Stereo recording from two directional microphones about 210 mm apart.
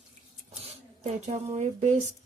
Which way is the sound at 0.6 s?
30° right (ahead or behind).